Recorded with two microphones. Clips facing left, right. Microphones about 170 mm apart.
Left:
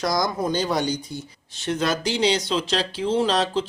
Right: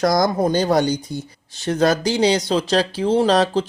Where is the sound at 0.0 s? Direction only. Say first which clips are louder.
Right 6 dB; 50° right (ahead or behind).